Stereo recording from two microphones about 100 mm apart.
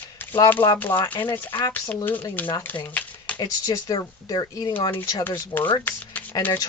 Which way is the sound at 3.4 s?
40° left (ahead or behind).